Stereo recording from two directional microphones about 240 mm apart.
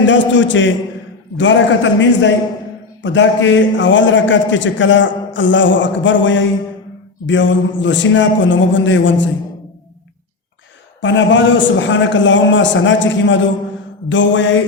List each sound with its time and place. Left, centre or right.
0.0 s a man's voice: left
11.0 s a man's voice: left